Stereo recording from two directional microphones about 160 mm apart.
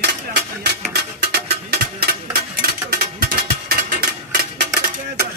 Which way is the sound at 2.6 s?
70° right (ahead or behind).